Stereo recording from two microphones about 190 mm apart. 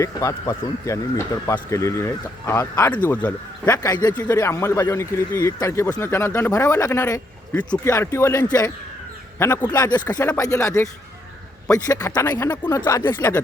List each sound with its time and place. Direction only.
0.0 s speech: 15° left (ahead or behind)
3.7 s speech: 20° left (ahead or behind)